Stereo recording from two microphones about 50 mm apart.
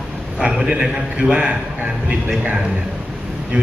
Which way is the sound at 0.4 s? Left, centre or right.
Centre.